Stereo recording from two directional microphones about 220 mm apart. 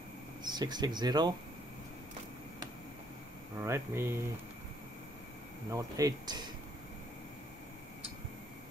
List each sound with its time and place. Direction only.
0.4 s speech: 20° right (ahead or behind)
3.5 s speech: 10° right (ahead or behind)
5.7 s speech: 15° right (ahead or behind)